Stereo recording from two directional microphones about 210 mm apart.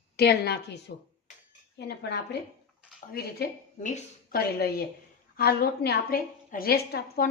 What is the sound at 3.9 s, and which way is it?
Speech, 35° left (ahead or behind).